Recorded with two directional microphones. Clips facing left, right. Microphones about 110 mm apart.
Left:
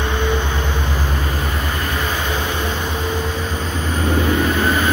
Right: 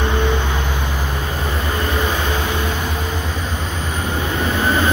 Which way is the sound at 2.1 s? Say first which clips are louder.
Right 1 dB; 15° right (ahead or behind).